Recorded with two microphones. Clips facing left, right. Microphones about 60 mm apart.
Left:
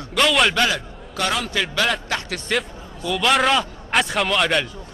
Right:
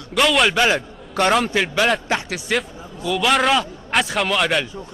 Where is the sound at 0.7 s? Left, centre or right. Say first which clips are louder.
Right 5 dB; right.